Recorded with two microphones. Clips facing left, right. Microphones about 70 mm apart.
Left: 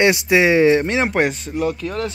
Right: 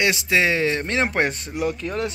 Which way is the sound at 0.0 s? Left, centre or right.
Left.